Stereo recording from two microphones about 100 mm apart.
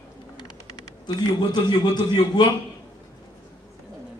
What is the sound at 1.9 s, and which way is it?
Speech, 45° left (ahead or behind).